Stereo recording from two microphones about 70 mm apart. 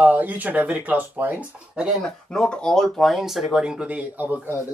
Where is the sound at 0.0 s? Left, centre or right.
Right.